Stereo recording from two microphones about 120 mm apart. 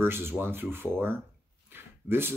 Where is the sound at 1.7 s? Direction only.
20° right (ahead or behind).